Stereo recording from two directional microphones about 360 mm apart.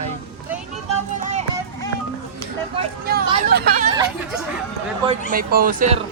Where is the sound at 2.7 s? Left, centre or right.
Right.